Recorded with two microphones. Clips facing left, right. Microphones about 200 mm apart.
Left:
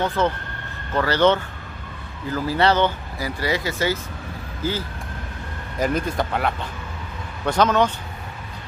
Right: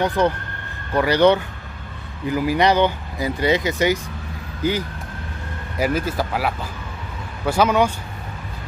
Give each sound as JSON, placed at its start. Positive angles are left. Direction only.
{"t": 0.0, "sound": "speech", "side_deg": -15}
{"t": 5.8, "sound": "speech", "side_deg": -5}